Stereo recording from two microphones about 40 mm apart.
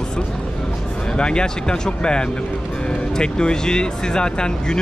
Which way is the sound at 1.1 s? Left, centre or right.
Left.